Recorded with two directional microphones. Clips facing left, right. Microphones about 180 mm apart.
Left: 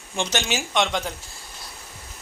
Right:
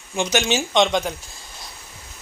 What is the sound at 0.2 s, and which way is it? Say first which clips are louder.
Speech: right 4 dB; 10° right (ahead or behind).